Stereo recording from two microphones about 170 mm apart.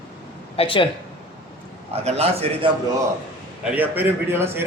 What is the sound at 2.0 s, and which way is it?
Speech, 40° right (ahead or behind).